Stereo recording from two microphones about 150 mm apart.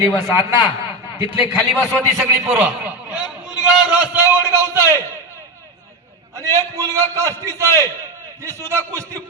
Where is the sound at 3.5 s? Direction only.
5° right (ahead or behind).